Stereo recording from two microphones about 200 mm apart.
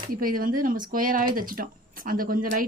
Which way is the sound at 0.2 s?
45° right (ahead or behind).